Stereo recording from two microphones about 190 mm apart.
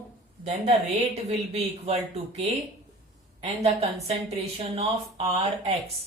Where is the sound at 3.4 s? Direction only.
35° right (ahead or behind).